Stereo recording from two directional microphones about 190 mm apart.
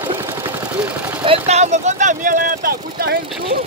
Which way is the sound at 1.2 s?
30° right (ahead or behind).